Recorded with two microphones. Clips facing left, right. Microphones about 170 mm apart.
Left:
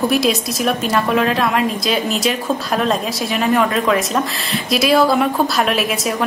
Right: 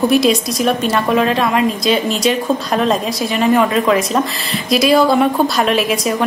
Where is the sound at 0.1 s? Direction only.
Centre (ahead or behind).